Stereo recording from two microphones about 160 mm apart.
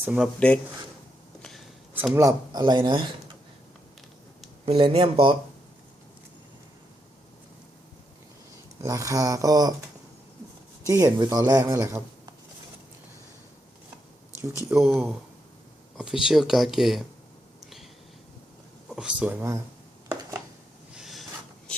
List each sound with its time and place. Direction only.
0.0 s speech: 5° right (ahead or behind)
0.3 s speech: 5° left (ahead or behind)
1.4 s a sound: centre (ahead or behind)
2.1 s speech: 25° right (ahead or behind)
4.6 s speech: 35° right (ahead or behind)
8.8 s speech: 20° right (ahead or behind)
10.8 s speech: 20° right (ahead or behind)
14.7 s speech: centre (ahead or behind)
17.6 s a sound: centre (ahead or behind)
18.9 s speech: 5° right (ahead or behind)
20.9 s a sound: centre (ahead or behind)